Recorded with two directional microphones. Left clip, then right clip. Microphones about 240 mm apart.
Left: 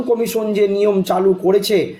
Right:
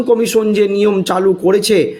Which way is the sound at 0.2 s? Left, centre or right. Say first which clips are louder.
Right 4 dB; right.